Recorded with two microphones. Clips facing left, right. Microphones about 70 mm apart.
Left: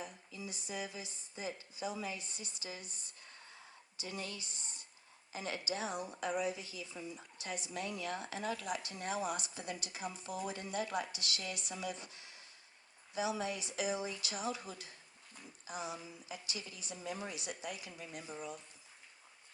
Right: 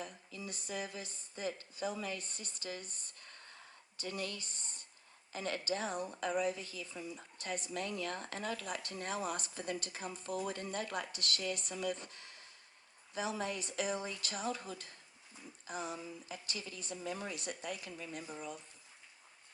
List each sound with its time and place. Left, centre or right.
0.0 s speech: right